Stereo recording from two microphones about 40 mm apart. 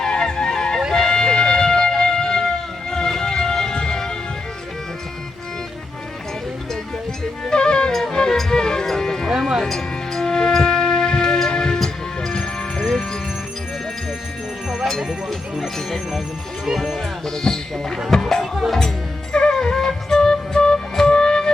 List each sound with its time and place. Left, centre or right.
0.0 s music: centre
7.4 s music: left
15.6 s music: centre
17.2 s a sound: centre
18.1 s music: centre